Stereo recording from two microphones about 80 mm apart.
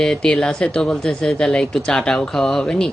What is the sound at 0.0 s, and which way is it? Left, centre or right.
Speech, centre.